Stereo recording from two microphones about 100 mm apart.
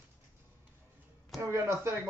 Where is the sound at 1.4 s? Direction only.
25° right (ahead or behind).